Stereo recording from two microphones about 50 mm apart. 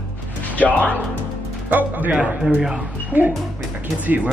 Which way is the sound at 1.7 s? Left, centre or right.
Right.